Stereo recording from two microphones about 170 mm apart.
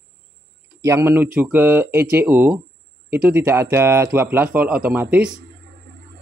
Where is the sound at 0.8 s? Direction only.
15° right (ahead or behind).